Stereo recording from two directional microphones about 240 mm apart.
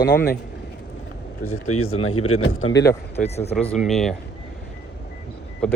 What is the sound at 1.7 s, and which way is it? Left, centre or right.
A man's voice, left.